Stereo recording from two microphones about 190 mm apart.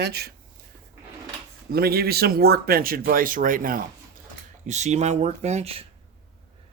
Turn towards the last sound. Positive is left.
turn(degrees=-35)  # may be behind; listen again after turning